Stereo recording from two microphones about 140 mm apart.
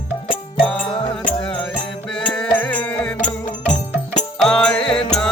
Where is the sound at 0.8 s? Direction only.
30° left (ahead or behind).